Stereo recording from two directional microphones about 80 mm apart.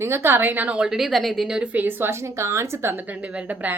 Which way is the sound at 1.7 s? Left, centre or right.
Right.